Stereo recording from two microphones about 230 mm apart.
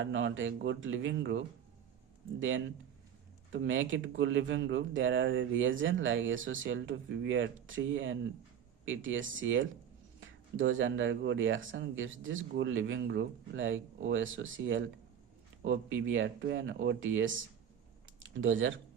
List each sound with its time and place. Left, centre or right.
0.0 s speech: right
3.5 s speech: right